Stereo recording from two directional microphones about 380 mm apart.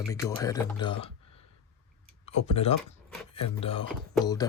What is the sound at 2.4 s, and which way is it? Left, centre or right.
Speech, centre.